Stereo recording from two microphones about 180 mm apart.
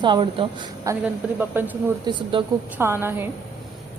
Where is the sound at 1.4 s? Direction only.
10° right (ahead or behind).